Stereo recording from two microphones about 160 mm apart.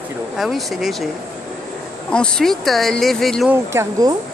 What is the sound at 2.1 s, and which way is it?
Speech, 5° left (ahead or behind).